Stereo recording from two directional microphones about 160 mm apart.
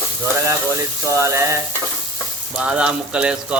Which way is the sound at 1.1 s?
20° right (ahead or behind).